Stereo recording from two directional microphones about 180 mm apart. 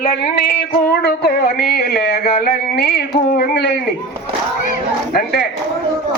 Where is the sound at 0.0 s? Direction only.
60° left (ahead or behind).